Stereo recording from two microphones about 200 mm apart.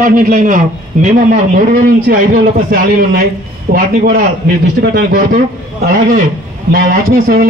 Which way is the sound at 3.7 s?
45° right (ahead or behind).